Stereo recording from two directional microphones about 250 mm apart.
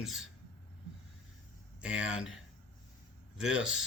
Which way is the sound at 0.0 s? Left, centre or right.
Centre.